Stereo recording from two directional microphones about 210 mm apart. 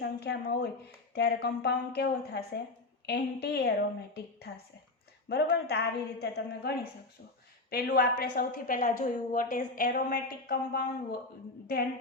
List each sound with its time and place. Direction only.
0.0 s a woman's voice: 50° left (ahead or behind)